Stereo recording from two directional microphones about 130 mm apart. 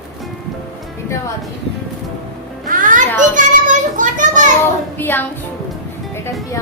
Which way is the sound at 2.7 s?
90° right.